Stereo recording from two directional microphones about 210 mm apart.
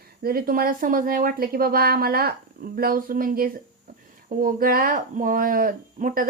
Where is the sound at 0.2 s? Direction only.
45° right (ahead or behind).